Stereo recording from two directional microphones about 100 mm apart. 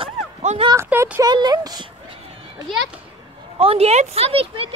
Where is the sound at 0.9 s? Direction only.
20° right (ahead or behind).